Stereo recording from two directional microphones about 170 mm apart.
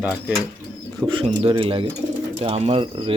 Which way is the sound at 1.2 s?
30° right (ahead or behind).